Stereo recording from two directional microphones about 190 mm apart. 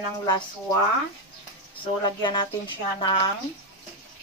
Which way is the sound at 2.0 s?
25° left (ahead or behind).